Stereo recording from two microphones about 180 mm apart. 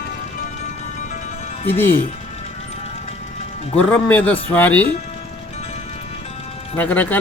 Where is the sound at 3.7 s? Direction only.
10° left (ahead or behind).